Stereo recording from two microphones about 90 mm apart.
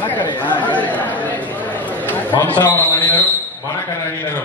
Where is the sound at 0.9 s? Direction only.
20° left (ahead or behind).